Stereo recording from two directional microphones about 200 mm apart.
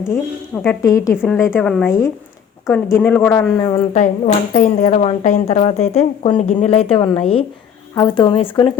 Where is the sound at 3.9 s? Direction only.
35° left (ahead or behind).